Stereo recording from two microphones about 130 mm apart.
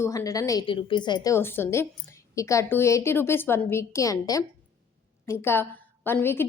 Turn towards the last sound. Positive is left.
turn(degrees=15)  # may be behind; listen again after turning